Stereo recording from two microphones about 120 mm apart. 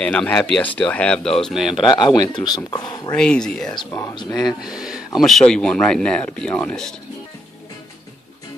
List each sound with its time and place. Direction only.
0.0 s speech: 10° left (ahead or behind)
1.9 s speech: 40° left (ahead or behind)
3.1 s speech: 5° left (ahead or behind)
3.9 s speech: 35° left (ahead or behind)
4.5 s speech: 5° right (ahead or behind)